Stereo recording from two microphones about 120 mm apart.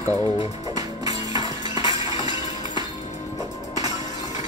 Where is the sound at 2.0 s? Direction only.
30° right (ahead or behind).